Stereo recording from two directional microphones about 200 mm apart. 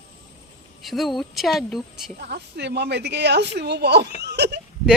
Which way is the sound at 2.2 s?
55° right (ahead or behind).